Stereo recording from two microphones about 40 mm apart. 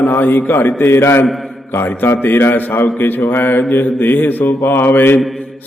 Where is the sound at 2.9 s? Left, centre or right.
Left.